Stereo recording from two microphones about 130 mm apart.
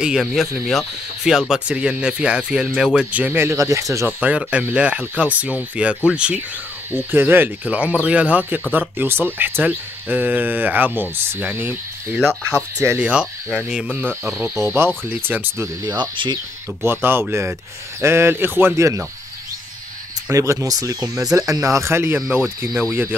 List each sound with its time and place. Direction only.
0.0 s speech: 5° right (ahead or behind)
4.3 s speech: 10° right (ahead or behind)
13.0 s speech: 10° right (ahead or behind)
13.9 s speech: 15° right (ahead or behind)
16.0 s speech: 35° right (ahead or behind)
16.8 s speech: 15° right (ahead or behind)
20.2 s speech: 25° right (ahead or behind)